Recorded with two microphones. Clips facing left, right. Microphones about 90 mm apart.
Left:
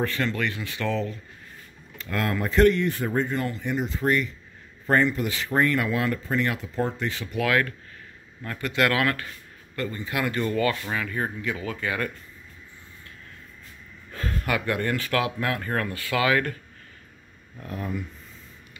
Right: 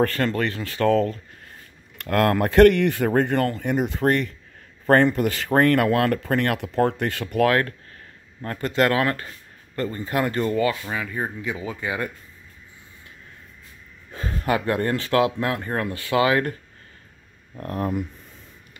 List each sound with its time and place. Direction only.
0.0 s speech: 45° right (ahead or behind)
2.0 s speech: 60° right (ahead or behind); by 10.4 s 35° right (ahead or behind)
10.5 s speech: 20° right (ahead or behind)
14.1 s speech: 25° right (ahead or behind)
17.6 s speech: 50° right (ahead or behind)